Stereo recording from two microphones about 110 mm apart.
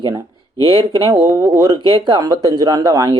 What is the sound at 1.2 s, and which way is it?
Speech, 25° right (ahead or behind).